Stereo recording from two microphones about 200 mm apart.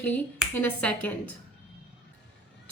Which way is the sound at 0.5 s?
5° left (ahead or behind).